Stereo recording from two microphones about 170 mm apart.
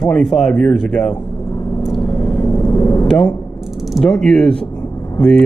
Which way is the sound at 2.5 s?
20° left (ahead or behind).